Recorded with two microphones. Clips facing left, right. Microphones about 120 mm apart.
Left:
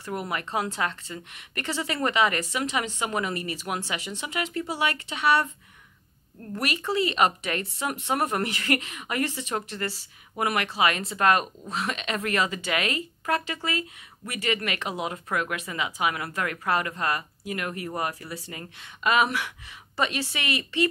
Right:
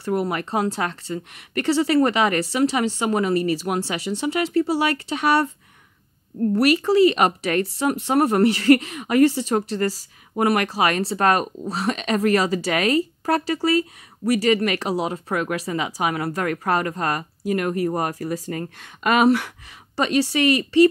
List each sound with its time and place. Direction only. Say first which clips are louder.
0.0 s speech: right 8 dB; 40° right (ahead or behind)